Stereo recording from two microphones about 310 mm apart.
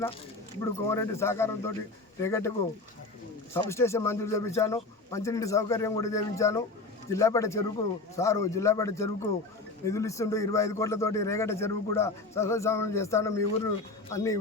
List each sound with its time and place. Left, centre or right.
0.6 s a man's voice: centre
3.5 s a man's voice: centre